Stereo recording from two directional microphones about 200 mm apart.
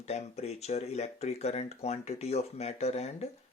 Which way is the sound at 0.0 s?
35° left (ahead or behind).